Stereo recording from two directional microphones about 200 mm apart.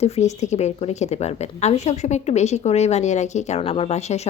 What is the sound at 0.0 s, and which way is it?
A woman's voice, 35° left (ahead or behind).